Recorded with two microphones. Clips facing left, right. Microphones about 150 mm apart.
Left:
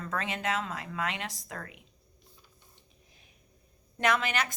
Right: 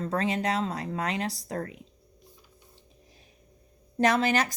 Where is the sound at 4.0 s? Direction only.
40° right (ahead or behind).